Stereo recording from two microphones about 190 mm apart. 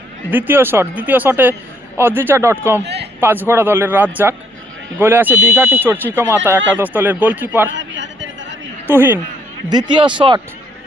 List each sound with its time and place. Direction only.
0.3 s speech: 10° right (ahead or behind)
2.8 s a sound: 60° right (ahead or behind)
3.2 s speech: 10° right (ahead or behind)
7.7 s a sound: 75° right (ahead or behind)
9.0 s speech: 10° right (ahead or behind)
9.6 s speech: 25° right (ahead or behind)